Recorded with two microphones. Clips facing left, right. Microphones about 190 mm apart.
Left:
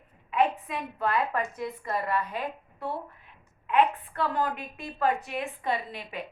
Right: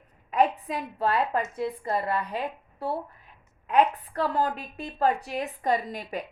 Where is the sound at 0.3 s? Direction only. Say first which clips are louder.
Right 2 dB; 40° right (ahead or behind).